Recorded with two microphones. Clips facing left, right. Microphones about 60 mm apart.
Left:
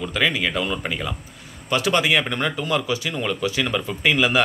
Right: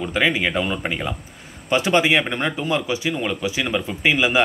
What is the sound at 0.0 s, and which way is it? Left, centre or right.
Speech, right.